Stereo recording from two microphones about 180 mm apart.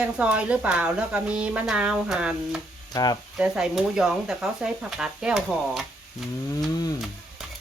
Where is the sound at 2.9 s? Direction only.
20° left (ahead or behind).